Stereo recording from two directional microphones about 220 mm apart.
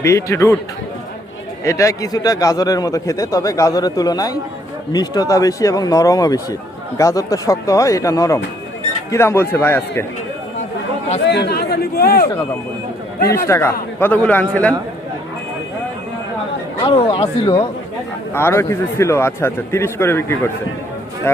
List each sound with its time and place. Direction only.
0.0 s speech: 15° left (ahead or behind)
1.6 s speech: 15° left (ahead or behind)
11.3 s speech: 50° left (ahead or behind)
13.5 s speech: 10° left (ahead or behind)
16.8 s speech: 25° left (ahead or behind)
18.3 s speech: 10° left (ahead or behind)